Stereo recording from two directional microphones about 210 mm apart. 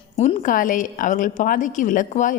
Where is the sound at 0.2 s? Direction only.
35° left (ahead or behind).